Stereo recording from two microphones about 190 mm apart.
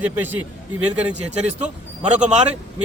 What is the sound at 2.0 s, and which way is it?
Speech, 35° right (ahead or behind).